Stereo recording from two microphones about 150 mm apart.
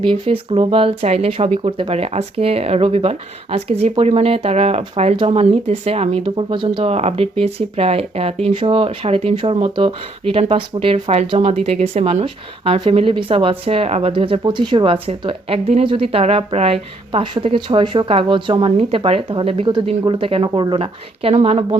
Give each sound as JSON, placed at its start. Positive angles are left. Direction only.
{"t": 0.0, "sound": "speech", "side_deg": -35}
{"t": 6.9, "sound": "speech", "side_deg": -40}